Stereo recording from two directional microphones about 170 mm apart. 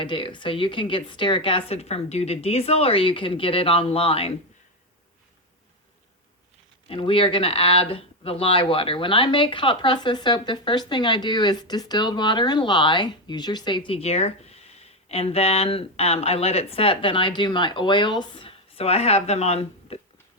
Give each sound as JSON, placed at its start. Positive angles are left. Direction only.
{"t": 0.0, "sound": "speech", "side_deg": 30}
{"t": 6.8, "sound": "speech", "side_deg": 30}